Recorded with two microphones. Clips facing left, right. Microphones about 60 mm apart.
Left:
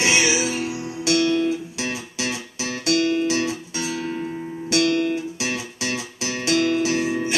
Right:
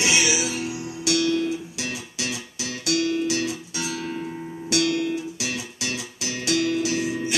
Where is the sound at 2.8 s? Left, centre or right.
Left.